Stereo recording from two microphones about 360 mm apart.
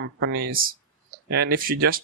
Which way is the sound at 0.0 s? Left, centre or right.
Right.